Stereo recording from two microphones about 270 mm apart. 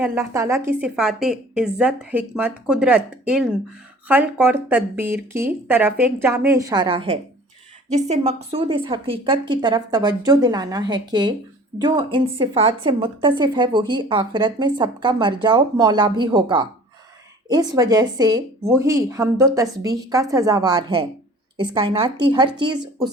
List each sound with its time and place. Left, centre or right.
0.0 s a woman's voice: centre